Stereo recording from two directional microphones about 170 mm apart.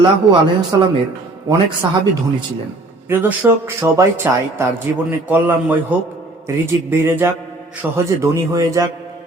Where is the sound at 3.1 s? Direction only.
10° right (ahead or behind).